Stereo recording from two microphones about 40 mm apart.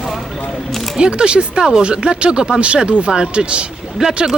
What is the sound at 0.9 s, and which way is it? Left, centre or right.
Speech, right.